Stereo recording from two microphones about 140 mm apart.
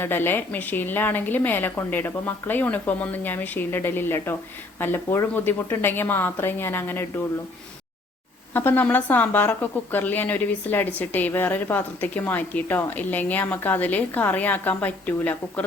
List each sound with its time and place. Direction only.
0.0 s a woman's voice: 15° left (ahead or behind)
8.5 s a woman's voice: 15° left (ahead or behind)